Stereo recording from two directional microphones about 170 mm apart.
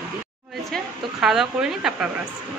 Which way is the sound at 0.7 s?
Centre (ahead or behind).